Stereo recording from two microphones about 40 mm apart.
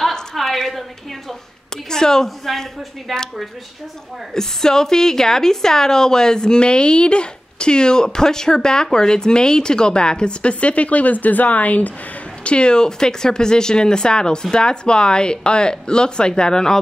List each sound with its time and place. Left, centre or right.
0.1 s a sound: centre
1.9 s a woman's voice: centre
2.2 s a man's voice: centre
4.3 s a woman's voice: centre; by 11.9 s left
12.4 s speech: left